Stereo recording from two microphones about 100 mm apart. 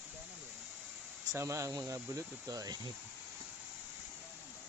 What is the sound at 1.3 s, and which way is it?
Speech, 30° right (ahead or behind).